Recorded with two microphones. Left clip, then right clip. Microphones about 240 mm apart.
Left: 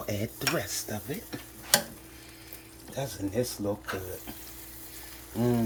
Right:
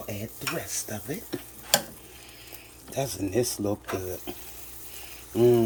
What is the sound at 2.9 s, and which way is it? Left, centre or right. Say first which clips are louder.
Speech: right 4 dB; right.